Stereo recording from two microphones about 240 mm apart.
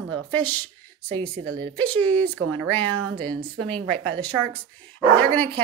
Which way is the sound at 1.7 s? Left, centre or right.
Centre.